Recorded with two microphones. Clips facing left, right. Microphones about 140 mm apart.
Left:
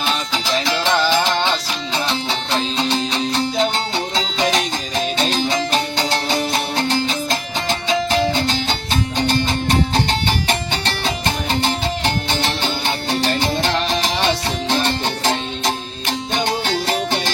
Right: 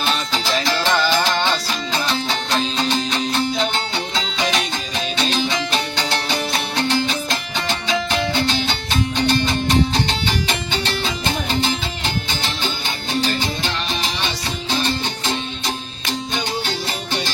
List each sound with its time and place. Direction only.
0.0 s music: 15° left (ahead or behind)
3.9 s music: 35° left (ahead or behind); by 10.6 s 50° left (ahead or behind)
11.6 s music: 60° left (ahead or behind)
16.3 s music: 65° left (ahead or behind)